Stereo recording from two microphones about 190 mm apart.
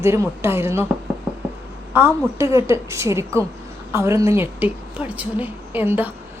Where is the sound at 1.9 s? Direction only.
15° right (ahead or behind).